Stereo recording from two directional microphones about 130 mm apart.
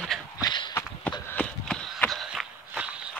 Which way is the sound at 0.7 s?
15° left (ahead or behind).